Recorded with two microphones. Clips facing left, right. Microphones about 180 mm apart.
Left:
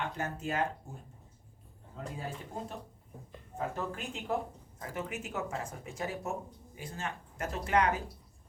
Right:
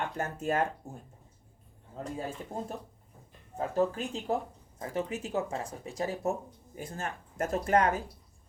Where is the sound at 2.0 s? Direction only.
40° right (ahead or behind).